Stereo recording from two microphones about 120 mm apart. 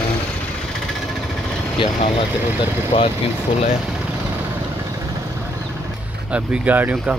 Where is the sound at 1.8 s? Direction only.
45° left (ahead or behind).